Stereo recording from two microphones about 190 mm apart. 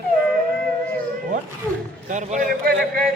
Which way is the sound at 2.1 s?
40° right (ahead or behind).